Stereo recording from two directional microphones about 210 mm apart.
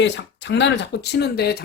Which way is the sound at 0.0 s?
55° left (ahead or behind).